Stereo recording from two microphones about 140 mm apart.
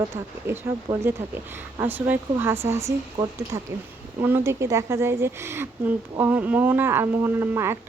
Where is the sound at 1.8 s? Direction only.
15° right (ahead or behind).